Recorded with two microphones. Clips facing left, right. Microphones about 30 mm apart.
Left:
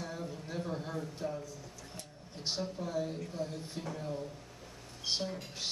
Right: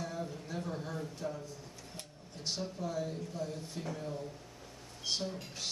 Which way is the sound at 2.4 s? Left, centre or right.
Left.